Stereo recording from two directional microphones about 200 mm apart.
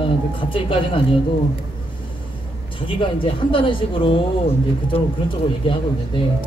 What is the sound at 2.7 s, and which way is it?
Speech, 25° left (ahead or behind).